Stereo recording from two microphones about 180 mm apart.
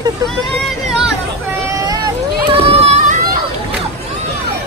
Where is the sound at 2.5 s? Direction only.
35° right (ahead or behind).